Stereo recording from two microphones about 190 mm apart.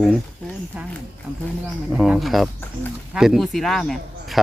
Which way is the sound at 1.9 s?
5° right (ahead or behind).